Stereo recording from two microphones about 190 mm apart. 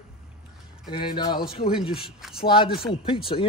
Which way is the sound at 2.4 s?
30° left (ahead or behind).